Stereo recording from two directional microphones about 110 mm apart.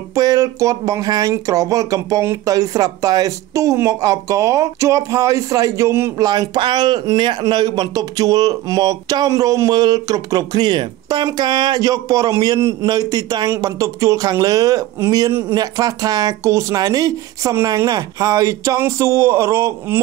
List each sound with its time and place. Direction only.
0.1 s speech: 35° right (ahead or behind)
6.2 s speech: 40° right (ahead or behind)